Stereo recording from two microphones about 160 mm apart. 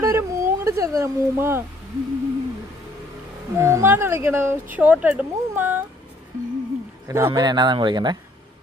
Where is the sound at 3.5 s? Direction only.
20° right (ahead or behind).